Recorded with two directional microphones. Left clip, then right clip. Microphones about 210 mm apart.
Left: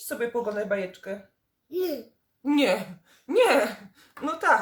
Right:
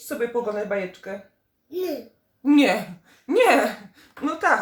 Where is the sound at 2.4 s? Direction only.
Centre (ahead or behind).